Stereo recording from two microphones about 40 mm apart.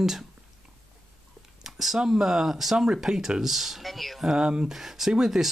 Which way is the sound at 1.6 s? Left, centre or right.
Centre.